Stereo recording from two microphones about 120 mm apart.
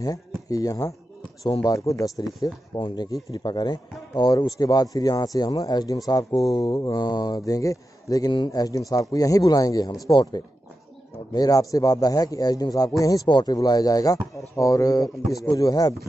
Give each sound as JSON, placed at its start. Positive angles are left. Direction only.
{"t": 0.0, "sound": "speech", "side_deg": 30}